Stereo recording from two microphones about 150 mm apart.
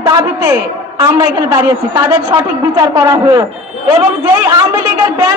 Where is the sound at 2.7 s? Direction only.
20° right (ahead or behind).